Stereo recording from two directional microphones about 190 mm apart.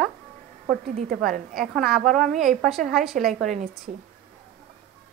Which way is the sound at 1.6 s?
Centre (ahead or behind).